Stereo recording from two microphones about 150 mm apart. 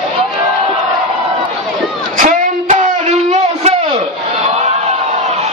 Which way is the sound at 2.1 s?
55° right (ahead or behind).